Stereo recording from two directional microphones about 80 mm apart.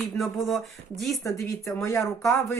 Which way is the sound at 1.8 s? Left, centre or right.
Left.